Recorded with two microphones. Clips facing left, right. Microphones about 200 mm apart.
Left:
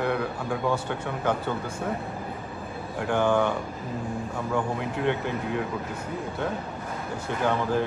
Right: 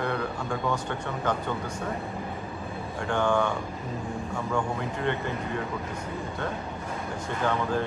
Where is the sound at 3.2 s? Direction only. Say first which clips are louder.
Left 2 dB; 20° left (ahead or behind).